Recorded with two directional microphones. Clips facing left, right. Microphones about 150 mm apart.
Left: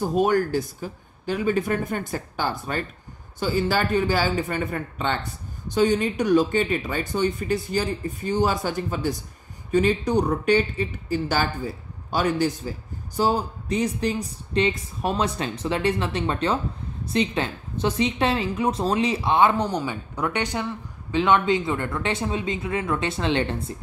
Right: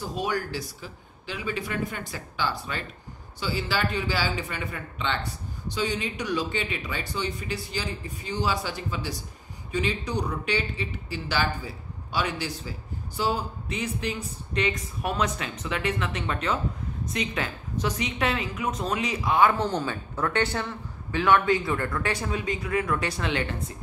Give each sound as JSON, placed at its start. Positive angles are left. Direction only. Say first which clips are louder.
{"t": 0.0, "sound": "a man's voice", "louder": "left 9 dB", "side_deg": 50}